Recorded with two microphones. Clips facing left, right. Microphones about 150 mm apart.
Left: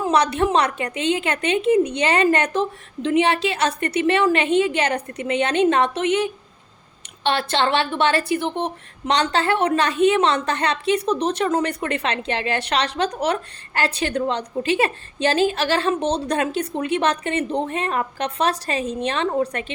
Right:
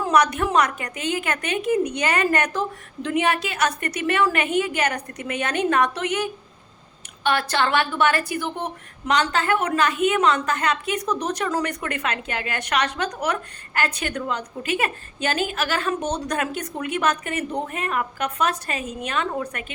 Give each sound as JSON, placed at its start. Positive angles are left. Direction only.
{"t": 0.0, "sound": "a woman's voice", "side_deg": 30}